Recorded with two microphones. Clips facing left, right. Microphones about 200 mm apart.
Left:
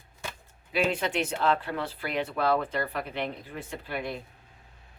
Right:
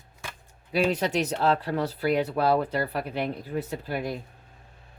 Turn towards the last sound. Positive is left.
turn(degrees=-40)  # may be behind; listen again after turning